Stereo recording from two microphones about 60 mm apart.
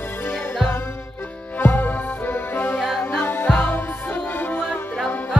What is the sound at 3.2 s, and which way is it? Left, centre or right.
Music, left.